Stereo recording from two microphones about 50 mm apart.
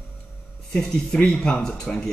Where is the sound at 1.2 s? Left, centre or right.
Centre.